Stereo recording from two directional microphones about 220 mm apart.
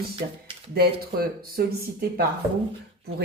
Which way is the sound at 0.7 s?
45° right (ahead or behind).